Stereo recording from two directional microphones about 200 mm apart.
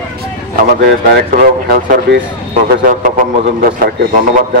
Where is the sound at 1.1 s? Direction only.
45° right (ahead or behind).